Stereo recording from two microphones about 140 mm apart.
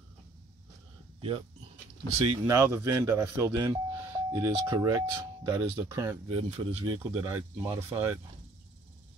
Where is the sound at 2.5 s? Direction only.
20° right (ahead or behind); by 7.0 s 40° right (ahead or behind).